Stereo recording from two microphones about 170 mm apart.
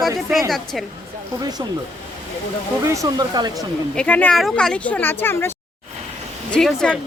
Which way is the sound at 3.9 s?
10° left (ahead or behind).